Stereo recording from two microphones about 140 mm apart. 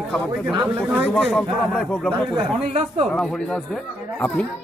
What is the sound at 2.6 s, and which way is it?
Speech, 50° right (ahead or behind).